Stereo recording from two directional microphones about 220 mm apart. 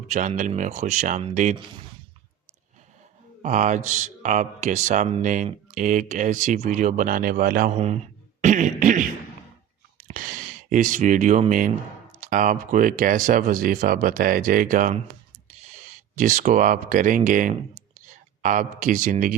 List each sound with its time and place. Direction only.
0.1 s speech: 35° right (ahead or behind)
3.4 s speech: 35° right (ahead or behind)
7.7 s speech: 30° right (ahead or behind)
10.1 s a sound: 35° right (ahead or behind)
12.2 s speech: 35° right (ahead or behind)
16.1 s speech: 35° right (ahead or behind)